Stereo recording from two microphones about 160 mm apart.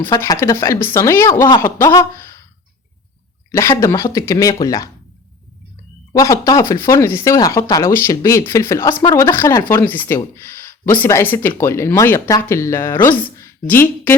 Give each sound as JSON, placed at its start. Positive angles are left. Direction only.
{"t": 0.1, "sound": "speech", "side_deg": 20}
{"t": 3.5, "sound": "speech", "side_deg": 15}
{"t": 6.1, "sound": "speech", "side_deg": 20}